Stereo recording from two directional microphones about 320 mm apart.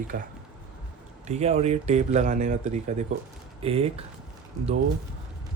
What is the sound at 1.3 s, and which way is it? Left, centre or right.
Speech, centre.